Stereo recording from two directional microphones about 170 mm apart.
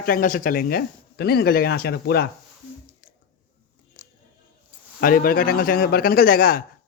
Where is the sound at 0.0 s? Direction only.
55° left (ahead or behind); by 2.3 s 70° left (ahead or behind).